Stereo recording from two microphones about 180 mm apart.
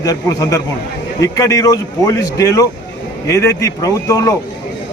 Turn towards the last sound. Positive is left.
turn(degrees=20)  # may be behind; listen again after turning